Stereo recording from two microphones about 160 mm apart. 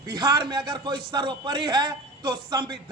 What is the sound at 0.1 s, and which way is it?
A man's voice, 25° right (ahead or behind).